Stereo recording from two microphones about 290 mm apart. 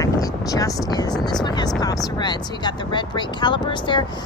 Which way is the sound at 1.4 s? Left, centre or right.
Centre.